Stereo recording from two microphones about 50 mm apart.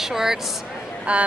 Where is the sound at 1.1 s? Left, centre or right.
Right.